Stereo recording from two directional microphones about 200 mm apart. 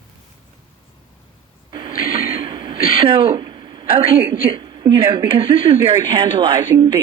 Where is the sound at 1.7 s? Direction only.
25° right (ahead or behind).